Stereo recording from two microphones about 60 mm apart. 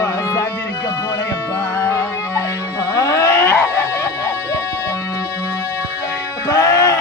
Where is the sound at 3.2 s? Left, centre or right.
Left.